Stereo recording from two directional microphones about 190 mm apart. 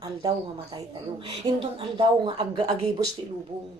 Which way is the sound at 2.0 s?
25° right (ahead or behind).